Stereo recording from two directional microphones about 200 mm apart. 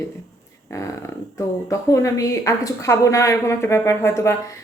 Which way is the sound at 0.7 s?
15° left (ahead or behind).